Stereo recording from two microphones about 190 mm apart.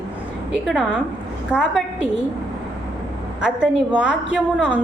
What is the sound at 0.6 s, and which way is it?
A woman's voice, 5° right (ahead or behind).